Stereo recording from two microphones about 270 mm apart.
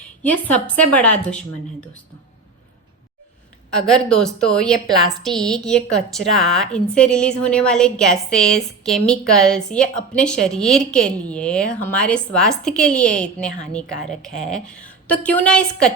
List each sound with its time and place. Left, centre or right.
0.2 s a woman's voice: centre
3.8 s a woman's voice: centre
13.2 s a woman's voice: left
14.7 s a woman's voice: centre